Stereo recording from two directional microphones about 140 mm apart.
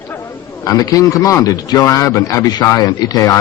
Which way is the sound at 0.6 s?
25° left (ahead or behind).